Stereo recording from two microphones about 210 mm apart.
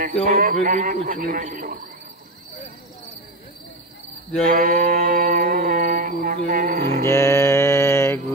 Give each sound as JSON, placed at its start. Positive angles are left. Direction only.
{"t": 0.2, "sound": "speech", "side_deg": -40}
{"t": 4.5, "sound": "mantra", "side_deg": -40}
{"t": 7.1, "sound": "mantra", "side_deg": 15}